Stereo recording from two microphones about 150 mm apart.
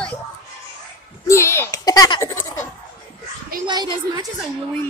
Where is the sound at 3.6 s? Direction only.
30° right (ahead or behind).